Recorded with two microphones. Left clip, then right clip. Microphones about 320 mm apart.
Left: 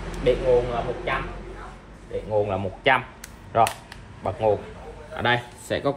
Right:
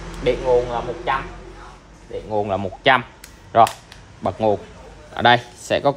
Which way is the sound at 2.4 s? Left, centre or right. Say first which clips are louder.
Right 8 dB; right.